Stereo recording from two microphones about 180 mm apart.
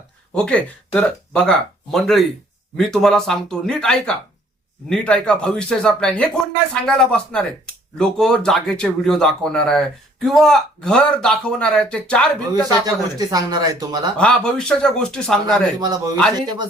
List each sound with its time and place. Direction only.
0.3 s a man's voice: 5° left (ahead or behind)
12.6 s speech: 20° right (ahead or behind)
14.2 s a man's voice: 5° left (ahead or behind)